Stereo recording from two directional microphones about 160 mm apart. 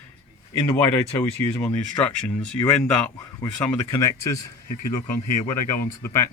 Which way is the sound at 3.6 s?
20° left (ahead or behind).